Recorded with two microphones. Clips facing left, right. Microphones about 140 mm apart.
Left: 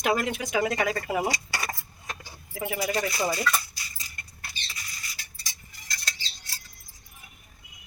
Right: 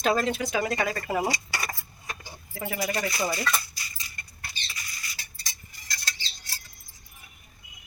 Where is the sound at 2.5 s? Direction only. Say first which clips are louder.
Left 2 dB; 15° left (ahead or behind).